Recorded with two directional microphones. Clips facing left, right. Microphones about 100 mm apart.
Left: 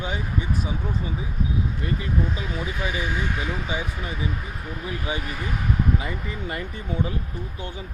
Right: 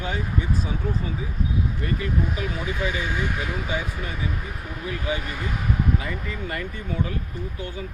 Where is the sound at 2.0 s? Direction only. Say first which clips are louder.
Right 1 dB; 20° left (ahead or behind).